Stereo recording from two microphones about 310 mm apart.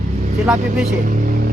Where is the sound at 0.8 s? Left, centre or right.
Right.